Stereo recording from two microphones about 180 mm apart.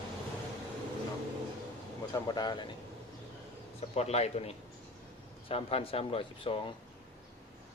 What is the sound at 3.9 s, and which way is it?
Speech, 35° left (ahead or behind).